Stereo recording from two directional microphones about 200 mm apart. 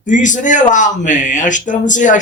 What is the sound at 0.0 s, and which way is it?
Speech, 40° left (ahead or behind).